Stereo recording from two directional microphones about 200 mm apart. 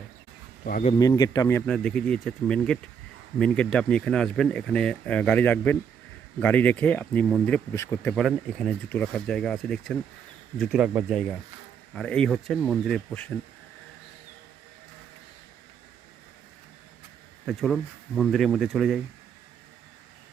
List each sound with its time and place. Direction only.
0.6 s speech: 45° left (ahead or behind)
0.9 s speech: 20° left (ahead or behind); by 13.3 s 5° left (ahead or behind)
17.4 s speech: centre (ahead or behind)